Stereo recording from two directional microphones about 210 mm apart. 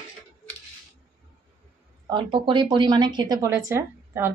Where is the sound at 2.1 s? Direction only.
25° right (ahead or behind).